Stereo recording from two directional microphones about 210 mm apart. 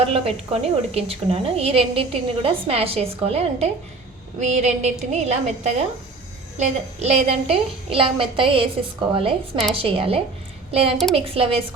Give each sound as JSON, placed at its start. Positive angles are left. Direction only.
{"t": 0.0, "sound": "a woman's voice", "side_deg": -25}